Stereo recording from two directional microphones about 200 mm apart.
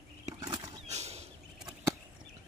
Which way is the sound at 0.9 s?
35° right (ahead or behind).